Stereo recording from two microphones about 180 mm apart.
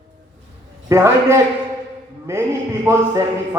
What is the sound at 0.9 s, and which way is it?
Speech, 15° right (ahead or behind).